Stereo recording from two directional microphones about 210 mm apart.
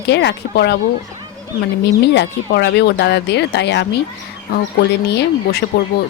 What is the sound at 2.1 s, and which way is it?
Speech, 55° left (ahead or behind).